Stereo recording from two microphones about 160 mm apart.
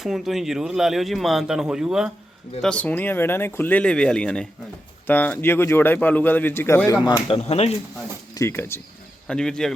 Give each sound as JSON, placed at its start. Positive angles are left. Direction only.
{"t": 0.0, "sound": "speech", "side_deg": 0}
{"t": 2.6, "sound": "a man's voice", "side_deg": 5}
{"t": 7.3, "sound": "speech", "side_deg": 40}
{"t": 8.4, "sound": "a man's voice", "side_deg": 15}
{"t": 9.2, "sound": "speech", "side_deg": 5}